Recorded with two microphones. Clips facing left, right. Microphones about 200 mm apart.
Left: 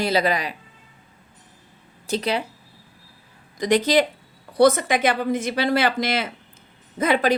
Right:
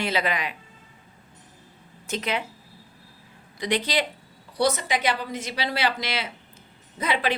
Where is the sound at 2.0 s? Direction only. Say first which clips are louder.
Left 5 dB; 35° left (ahead or behind).